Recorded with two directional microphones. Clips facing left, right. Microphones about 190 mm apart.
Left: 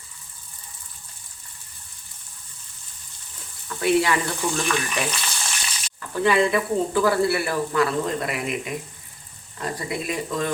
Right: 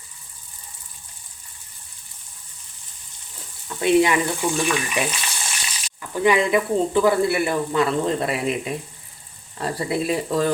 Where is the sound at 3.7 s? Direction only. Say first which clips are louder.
Right 3 dB; 20° right (ahead or behind).